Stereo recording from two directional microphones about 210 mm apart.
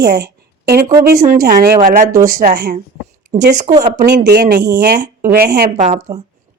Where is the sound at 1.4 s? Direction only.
40° right (ahead or behind).